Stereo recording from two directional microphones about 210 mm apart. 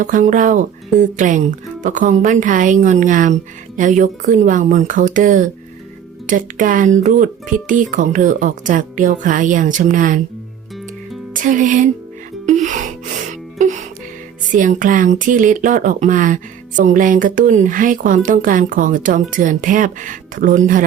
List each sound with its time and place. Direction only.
0.0 s speech: 40° right (ahead or behind)
11.3 s speech: 40° right (ahead or behind)
12.5 s music: 35° right (ahead or behind)
14.5 s speech: 40° right (ahead or behind)